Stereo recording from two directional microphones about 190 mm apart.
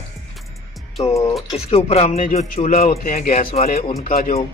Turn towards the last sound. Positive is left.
turn(degrees=50)  # may be behind; listen again after turning